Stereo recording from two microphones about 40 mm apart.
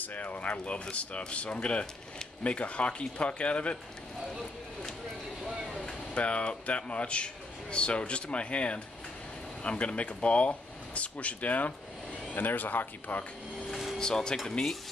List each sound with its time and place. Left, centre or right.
0.0 s speech: left
5.4 s a sound: centre
6.1 s speech: left
12.4 s speech: left
13.9 s speech: centre